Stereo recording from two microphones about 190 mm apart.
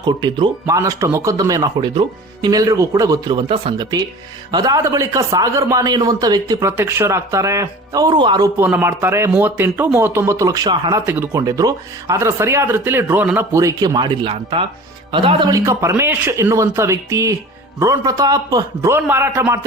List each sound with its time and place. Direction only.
0.0 s speech: 20° right (ahead or behind)
8.5 s speech: 10° right (ahead or behind)
11.0 s speech: 10° right (ahead or behind)